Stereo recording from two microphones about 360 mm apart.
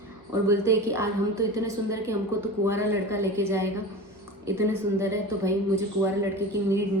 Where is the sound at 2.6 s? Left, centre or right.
Centre.